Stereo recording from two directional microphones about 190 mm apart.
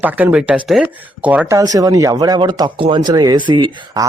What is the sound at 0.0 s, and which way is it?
A man's voice, 10° right (ahead or behind).